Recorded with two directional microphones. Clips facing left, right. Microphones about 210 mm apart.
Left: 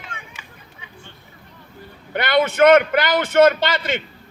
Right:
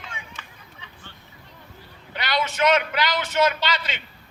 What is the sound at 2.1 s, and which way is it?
A man's voice, 55° left (ahead or behind).